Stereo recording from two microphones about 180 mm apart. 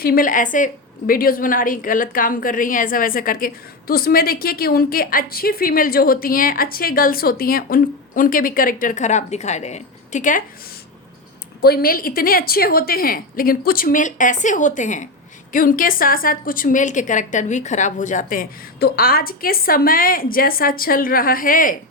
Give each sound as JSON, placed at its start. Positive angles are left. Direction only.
{"t": 0.0, "sound": "a woman's voice", "side_deg": 50}
{"t": 11.6, "sound": "a woman's voice", "side_deg": 60}